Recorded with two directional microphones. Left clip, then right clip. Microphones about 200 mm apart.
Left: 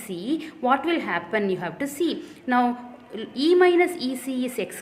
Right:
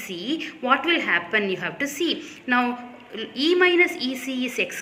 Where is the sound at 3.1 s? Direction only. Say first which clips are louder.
Left 1 dB; 50° left (ahead or behind).